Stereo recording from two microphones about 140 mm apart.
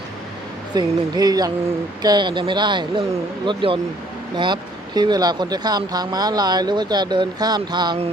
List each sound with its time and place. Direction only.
0.7 s speech: 30° right (ahead or behind)